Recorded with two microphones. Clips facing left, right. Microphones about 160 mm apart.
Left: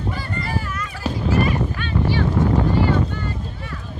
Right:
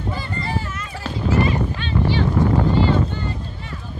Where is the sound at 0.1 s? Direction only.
25° right (ahead or behind).